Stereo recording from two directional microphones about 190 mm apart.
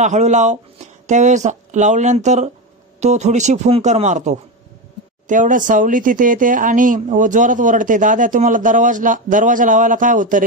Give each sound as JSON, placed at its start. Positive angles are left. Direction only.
{"t": 0.0, "sound": "speech", "side_deg": -40}